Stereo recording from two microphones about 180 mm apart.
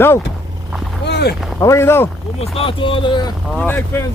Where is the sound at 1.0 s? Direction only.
65° left (ahead or behind).